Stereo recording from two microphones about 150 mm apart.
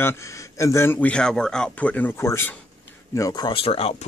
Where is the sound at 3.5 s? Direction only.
40° left (ahead or behind).